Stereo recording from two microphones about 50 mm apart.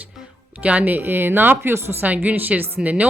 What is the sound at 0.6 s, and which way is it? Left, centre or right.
A woman's voice, right.